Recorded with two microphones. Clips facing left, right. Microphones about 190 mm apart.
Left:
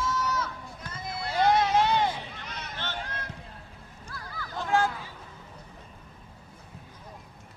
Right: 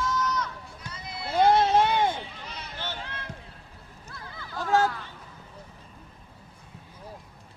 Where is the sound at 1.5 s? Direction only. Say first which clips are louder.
Right 1 dB; 30° right (ahead or behind).